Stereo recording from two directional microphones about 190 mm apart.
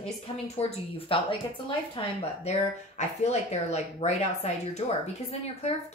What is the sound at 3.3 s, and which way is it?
Speech, 35° left (ahead or behind).